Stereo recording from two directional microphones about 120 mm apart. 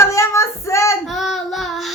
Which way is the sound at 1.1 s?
Centre (ahead or behind).